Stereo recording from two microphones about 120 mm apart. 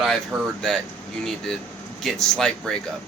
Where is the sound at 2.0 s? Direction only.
Centre (ahead or behind).